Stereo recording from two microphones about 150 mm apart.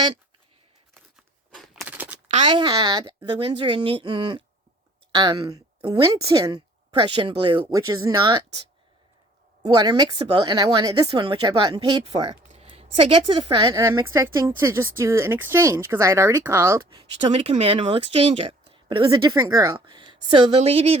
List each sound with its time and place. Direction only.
1.5 s a sound: centre (ahead or behind)
2.4 s a woman's voice: 30° right (ahead or behind)
7.6 s a woman's voice: 20° right (ahead or behind)
9.6 s a woman's voice: 30° right (ahead or behind)
12.5 s a sound: 45° right (ahead or behind)
13.5 s a woman's voice: 25° right (ahead or behind)
17.3 s a woman's voice: 40° right (ahead or behind)
19.1 s a woman's voice: 20° right (ahead or behind)
19.7 s speech: 30° right (ahead or behind)